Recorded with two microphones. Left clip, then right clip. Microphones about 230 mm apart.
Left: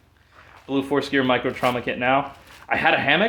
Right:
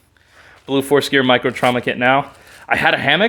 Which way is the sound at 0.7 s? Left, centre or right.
Right.